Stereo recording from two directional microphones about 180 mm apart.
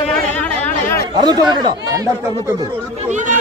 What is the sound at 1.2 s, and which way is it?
Speech, 20° right (ahead or behind).